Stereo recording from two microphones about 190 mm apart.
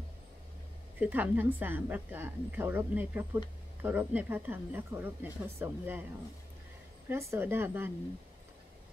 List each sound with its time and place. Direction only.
0.9 s a woman's voice: 10° right (ahead or behind)
7.1 s a woman's voice: 15° right (ahead or behind)